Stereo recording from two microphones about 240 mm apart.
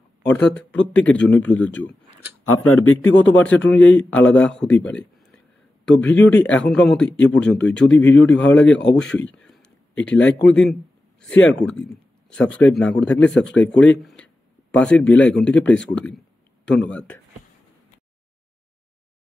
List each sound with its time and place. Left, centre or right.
0.3 s a man's voice: centre
2.4 s speech: left
3.1 s speech: left
3.3 s a man's voice: centre